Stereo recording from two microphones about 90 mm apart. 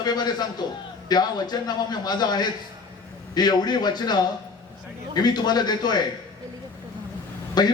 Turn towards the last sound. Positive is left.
turn(degrees=50)  # may be behind; listen again after turning